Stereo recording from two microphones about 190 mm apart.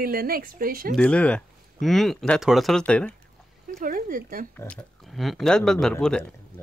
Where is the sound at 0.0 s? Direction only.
50° right (ahead or behind).